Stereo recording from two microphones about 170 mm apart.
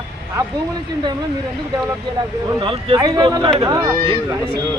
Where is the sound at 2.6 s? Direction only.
25° right (ahead or behind).